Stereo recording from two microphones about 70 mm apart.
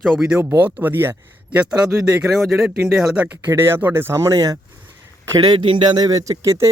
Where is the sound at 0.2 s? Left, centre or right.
Centre.